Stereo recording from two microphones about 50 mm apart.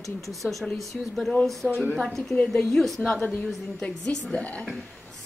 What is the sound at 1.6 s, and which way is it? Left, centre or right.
A woman's voice, centre.